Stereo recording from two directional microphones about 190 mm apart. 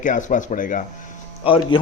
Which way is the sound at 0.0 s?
40° left (ahead or behind).